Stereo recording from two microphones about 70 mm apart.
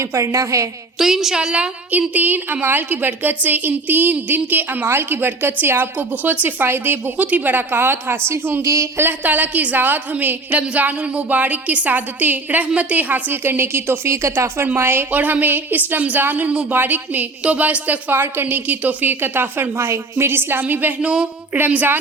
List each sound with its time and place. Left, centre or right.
0.0 s a woman's voice: right
0.9 s a woman's voice: centre
1.9 s a woman's voice: right
8.6 s a woman's voice: right
9.0 s a woman's voice: right
15.1 s a woman's voice: right
21.1 s a woman's voice: centre
21.6 s a woman's voice: right